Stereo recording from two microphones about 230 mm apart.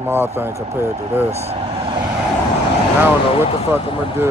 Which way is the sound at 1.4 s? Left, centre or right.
Right.